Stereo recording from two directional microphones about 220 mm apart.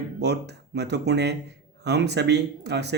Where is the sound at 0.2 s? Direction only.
50° right (ahead or behind).